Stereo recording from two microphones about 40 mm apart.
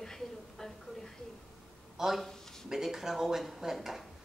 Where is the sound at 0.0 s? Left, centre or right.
Centre.